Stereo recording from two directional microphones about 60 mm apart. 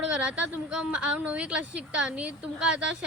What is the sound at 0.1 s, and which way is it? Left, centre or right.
A woman's voice, centre.